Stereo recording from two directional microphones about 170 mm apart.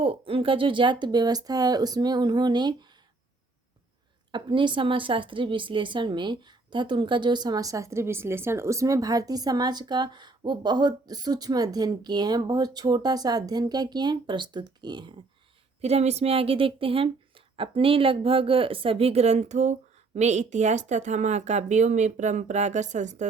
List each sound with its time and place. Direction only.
0.0 s a woman's voice: 35° right (ahead or behind)
4.3 s a woman's voice: 30° right (ahead or behind)
15.8 s speech: 40° right (ahead or behind)